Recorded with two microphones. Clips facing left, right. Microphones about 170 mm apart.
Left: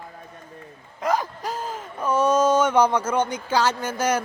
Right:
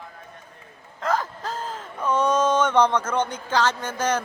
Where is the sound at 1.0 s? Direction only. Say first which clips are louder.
Left 1 dB; 15° left (ahead or behind).